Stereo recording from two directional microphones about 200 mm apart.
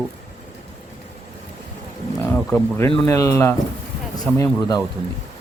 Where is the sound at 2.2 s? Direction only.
10° left (ahead or behind).